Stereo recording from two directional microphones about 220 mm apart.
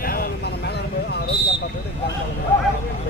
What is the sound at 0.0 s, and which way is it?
Vehicle, 40° left (ahead or behind).